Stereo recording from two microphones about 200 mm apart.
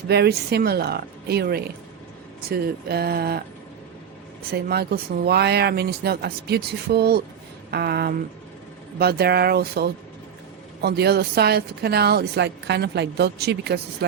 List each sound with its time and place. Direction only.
0.1 s a woman's voice: 55° right (ahead or behind)
4.5 s a woman's voice: 50° right (ahead or behind)